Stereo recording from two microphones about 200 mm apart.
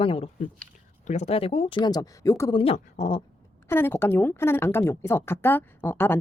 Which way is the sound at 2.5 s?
30° left (ahead or behind).